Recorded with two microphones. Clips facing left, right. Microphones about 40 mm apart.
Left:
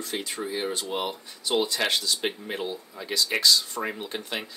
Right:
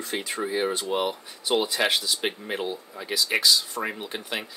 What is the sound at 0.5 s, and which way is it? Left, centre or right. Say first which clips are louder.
Speech: right 4 dB; centre.